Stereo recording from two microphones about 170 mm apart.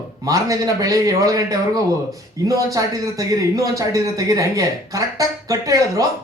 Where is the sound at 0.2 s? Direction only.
20° right (ahead or behind).